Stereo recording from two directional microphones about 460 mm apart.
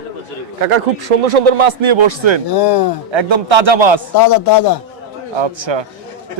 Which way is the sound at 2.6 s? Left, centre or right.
Left.